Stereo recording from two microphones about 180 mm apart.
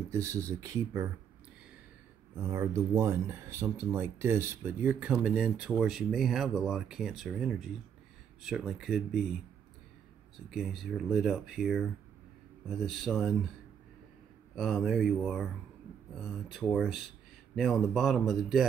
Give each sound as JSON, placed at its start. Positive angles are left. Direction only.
{"t": 0.1, "sound": "speech", "side_deg": -15}
{"t": 2.4, "sound": "speech", "side_deg": -15}
{"t": 10.5, "sound": "speech", "side_deg": 0}
{"t": 14.5, "sound": "speech", "side_deg": 0}